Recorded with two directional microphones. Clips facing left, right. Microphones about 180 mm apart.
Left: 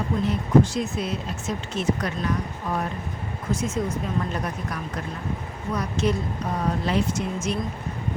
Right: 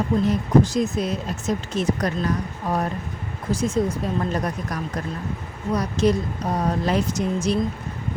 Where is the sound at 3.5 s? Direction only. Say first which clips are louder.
Right 3 dB; 35° right (ahead or behind).